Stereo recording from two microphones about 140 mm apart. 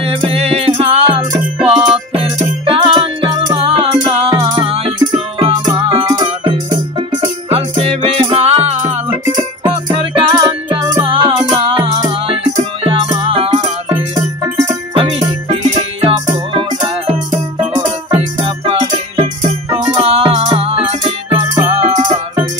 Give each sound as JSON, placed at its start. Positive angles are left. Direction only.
{"t": 0.0, "sound": "music", "side_deg": -45}
{"t": 4.6, "sound": "music", "side_deg": -45}
{"t": 7.4, "sound": "music", "side_deg": -45}
{"t": 9.3, "sound": "music", "side_deg": -30}
{"t": 14.4, "sound": "music", "side_deg": -25}
{"t": 15.0, "sound": "music", "side_deg": -40}
{"t": 21.7, "sound": "music", "side_deg": -55}